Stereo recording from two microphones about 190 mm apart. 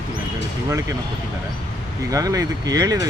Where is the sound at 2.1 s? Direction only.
15° right (ahead or behind).